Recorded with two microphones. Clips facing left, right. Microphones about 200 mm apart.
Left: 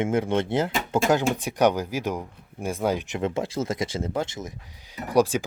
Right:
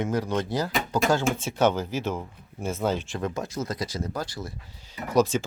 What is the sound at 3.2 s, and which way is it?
Speech, 30° left (ahead or behind).